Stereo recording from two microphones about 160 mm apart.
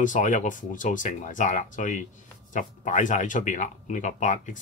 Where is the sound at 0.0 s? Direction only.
50° left (ahead or behind).